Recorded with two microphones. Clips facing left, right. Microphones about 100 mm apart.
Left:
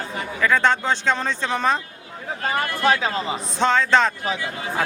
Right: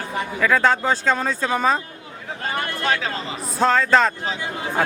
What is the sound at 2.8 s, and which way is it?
Speech, 20° left (ahead or behind).